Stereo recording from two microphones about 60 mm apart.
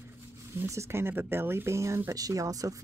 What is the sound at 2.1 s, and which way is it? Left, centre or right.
Speech, right.